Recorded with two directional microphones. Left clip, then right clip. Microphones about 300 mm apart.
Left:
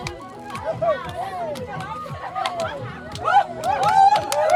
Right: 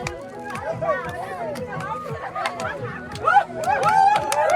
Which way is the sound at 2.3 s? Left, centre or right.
Centre.